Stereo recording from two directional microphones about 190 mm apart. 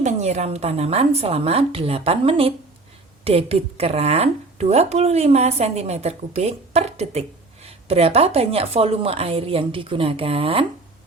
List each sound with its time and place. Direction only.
0.0 s a woman's voice: 35° right (ahead or behind)